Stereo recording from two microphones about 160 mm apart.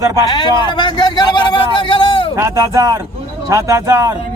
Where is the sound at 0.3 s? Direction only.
30° left (ahead or behind).